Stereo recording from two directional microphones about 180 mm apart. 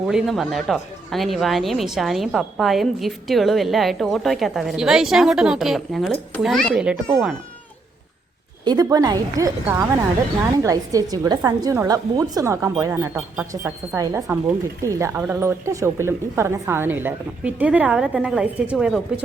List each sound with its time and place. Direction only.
0.1 s a woman's voice: centre (ahead or behind)
8.6 s a woman's voice: 20° right (ahead or behind); by 18.9 s 5° right (ahead or behind)